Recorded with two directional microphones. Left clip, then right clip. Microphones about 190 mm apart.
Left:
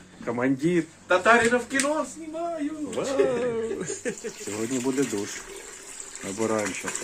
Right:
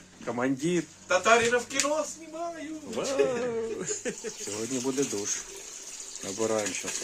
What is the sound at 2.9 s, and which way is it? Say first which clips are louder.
Speech: left 2 dB; 5° right (ahead or behind).